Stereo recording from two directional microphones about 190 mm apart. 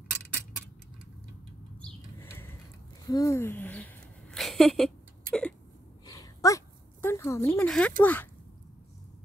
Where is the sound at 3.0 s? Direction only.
20° left (ahead or behind).